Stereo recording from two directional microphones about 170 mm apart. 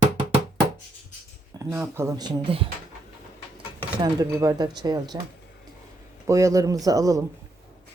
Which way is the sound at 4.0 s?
20° right (ahead or behind).